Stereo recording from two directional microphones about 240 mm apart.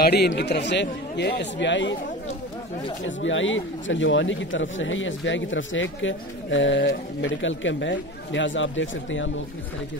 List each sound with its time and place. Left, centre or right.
0.0 s speech: left
3.1 s speech: left